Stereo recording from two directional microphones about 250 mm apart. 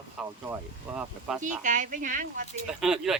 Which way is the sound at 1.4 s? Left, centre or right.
Right.